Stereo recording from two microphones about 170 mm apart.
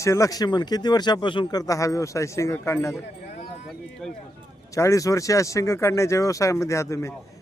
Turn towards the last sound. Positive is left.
turn(degrees=15)  # may be behind; listen again after turning